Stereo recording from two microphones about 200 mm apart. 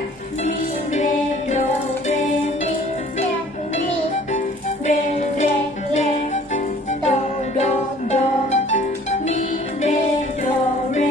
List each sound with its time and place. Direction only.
0.5 s music: 35° left (ahead or behind)
4.8 s music: 35° left (ahead or behind)